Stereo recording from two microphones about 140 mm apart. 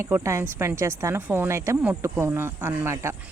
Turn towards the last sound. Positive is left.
turn(degrees=-20)  # may be behind; listen again after turning